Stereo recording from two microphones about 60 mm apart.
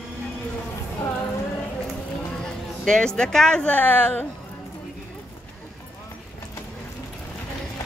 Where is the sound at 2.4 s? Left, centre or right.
Centre; by 4.3 s left.